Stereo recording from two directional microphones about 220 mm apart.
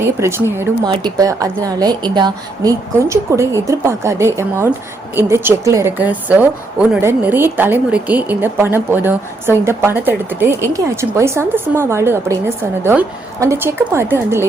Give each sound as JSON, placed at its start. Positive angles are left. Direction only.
{"t": 0.0, "sound": "a woman's voice", "side_deg": -10}